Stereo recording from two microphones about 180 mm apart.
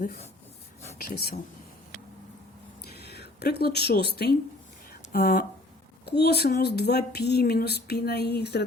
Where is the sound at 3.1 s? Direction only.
65° left (ahead or behind).